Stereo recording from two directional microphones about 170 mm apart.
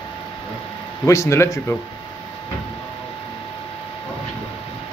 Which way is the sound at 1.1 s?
15° left (ahead or behind).